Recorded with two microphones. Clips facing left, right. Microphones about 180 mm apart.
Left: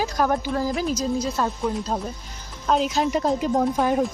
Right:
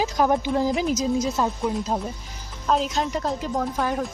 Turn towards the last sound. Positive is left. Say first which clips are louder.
# left 4 dB
turn(degrees=20)  # may be behind; listen again after turning